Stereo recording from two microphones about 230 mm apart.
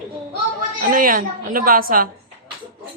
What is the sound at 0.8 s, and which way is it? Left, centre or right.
A woman's voice, right.